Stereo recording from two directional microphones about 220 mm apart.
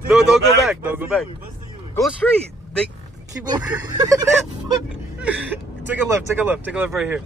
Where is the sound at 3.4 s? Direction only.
20° right (ahead or behind).